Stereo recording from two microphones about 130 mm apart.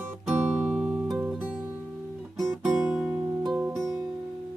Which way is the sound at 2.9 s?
5° right (ahead or behind).